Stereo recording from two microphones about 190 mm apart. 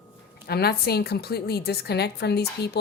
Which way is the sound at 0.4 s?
55° left (ahead or behind).